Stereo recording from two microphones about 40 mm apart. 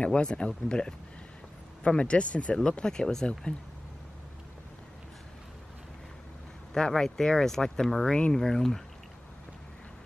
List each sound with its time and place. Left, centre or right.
0.0 s speech: left
2.0 s speech: left
6.7 s speech: centre